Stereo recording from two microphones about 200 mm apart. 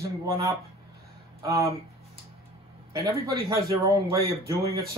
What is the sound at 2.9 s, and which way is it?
Speech, 15° right (ahead or behind).